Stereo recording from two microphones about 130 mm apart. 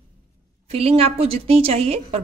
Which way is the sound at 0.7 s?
50° right (ahead or behind).